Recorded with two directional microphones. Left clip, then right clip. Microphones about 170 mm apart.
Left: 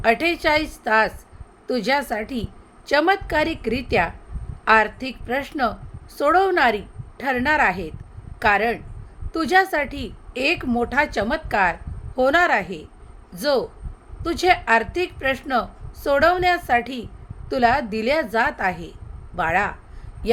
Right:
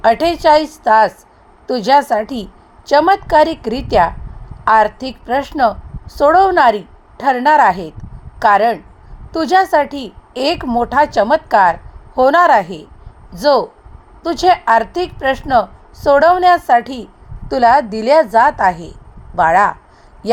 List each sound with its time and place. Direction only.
0.0 s a woman's voice: 20° right (ahead or behind)